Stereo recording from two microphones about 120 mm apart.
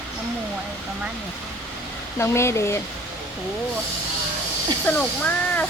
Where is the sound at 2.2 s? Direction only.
20° left (ahead or behind).